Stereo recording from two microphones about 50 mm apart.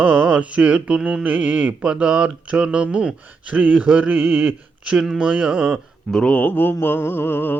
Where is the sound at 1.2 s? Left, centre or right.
Right.